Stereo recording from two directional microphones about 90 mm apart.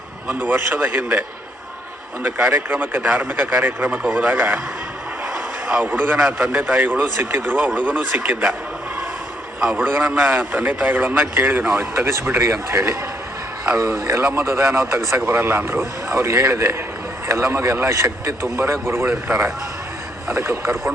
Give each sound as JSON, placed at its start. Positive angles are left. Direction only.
{"t": 0.3, "sound": "a man's voice", "side_deg": -20}
{"t": 2.2, "sound": "a man's voice", "side_deg": -10}
{"t": 4.0, "sound": "a man's voice", "side_deg": -10}
{"t": 5.3, "sound": "a sound", "side_deg": -5}
{"t": 5.8, "sound": "a man's voice", "side_deg": -20}
{"t": 6.1, "sound": "a man's voice", "side_deg": -5}
{"t": 6.6, "sound": "a man's voice", "side_deg": -20}
{"t": 9.6, "sound": "a man's voice", "side_deg": -5}
{"t": 9.8, "sound": "a man's voice", "side_deg": -20}
{"t": 20.3, "sound": "a man's voice", "side_deg": -30}